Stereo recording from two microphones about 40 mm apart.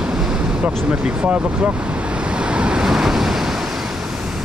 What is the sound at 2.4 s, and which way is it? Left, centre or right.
Waves, right.